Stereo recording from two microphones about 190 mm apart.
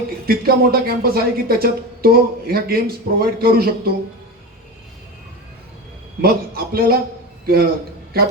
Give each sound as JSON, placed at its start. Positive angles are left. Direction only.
{"t": 0.3, "sound": "speech", "side_deg": -55}
{"t": 6.2, "sound": "a man's voice", "side_deg": -50}